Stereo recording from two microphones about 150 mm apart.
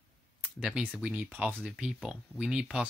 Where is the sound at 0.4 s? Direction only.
5° right (ahead or behind).